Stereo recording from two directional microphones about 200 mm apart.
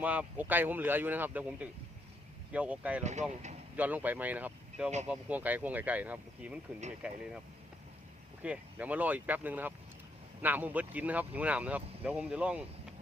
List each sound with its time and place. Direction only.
0.0 s speech: 5° right (ahead or behind)
3.0 s speech: 35° right (ahead or behind)
3.8 s speech: 10° right (ahead or behind)
8.4 s speech: 5° right (ahead or behind)